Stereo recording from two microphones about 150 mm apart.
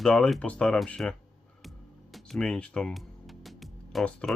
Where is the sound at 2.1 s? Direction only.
5° left (ahead or behind).